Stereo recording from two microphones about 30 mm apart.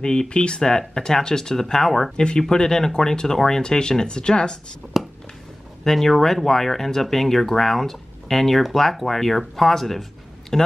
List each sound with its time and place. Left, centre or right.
0.0 s speech: left
0.6 s speech: centre
2.1 s speech: left
4.9 s a sound: centre
5.9 s speech: centre